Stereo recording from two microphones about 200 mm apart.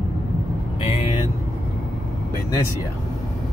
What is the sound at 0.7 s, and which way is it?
Vehicle, 30° left (ahead or behind).